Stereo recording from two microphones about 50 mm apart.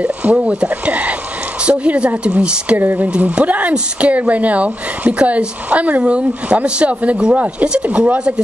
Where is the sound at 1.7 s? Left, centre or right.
Right.